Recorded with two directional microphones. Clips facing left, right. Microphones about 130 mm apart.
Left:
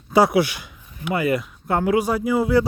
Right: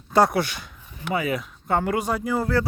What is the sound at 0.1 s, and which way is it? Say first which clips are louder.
Speech: left 3 dB; 10° left (ahead or behind).